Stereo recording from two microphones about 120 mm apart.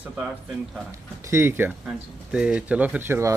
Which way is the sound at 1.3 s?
20° right (ahead or behind).